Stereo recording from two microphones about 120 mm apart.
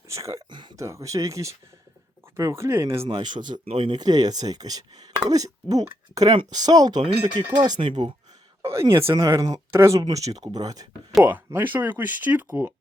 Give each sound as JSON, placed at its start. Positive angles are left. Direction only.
{"t": 0.1, "sound": "speech", "side_deg": -25}
{"t": 3.1, "sound": "speech", "side_deg": -40}
{"t": 8.6, "sound": "speech", "side_deg": -25}
{"t": 11.2, "sound": "speech", "side_deg": -15}